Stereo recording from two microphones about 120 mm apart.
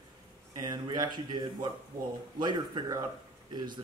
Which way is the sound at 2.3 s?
40° right (ahead or behind).